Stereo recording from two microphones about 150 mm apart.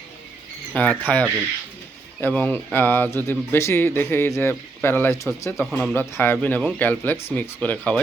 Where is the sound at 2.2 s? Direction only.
10° left (ahead or behind).